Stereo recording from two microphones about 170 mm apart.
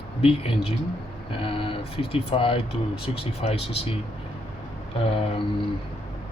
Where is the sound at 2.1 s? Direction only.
30° left (ahead or behind).